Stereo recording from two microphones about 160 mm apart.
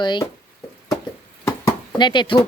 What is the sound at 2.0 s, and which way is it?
Speech, 30° left (ahead or behind).